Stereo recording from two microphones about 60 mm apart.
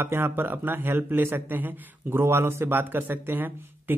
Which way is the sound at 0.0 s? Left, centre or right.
Right.